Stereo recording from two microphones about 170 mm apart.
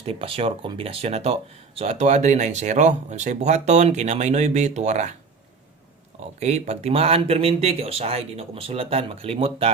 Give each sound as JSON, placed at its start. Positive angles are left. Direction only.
{"t": 0.0, "sound": "speech", "side_deg": -35}
{"t": 6.4, "sound": "speech", "side_deg": -40}